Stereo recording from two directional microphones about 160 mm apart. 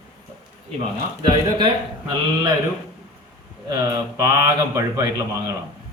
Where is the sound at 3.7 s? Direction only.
20° right (ahead or behind).